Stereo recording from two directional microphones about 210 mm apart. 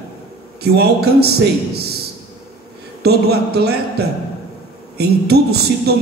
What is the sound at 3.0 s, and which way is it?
A man's voice, 50° right (ahead or behind).